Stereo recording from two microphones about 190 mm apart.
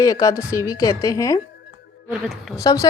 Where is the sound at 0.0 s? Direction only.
15° left (ahead or behind).